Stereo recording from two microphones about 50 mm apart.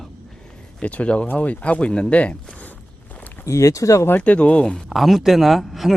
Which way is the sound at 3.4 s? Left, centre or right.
Left.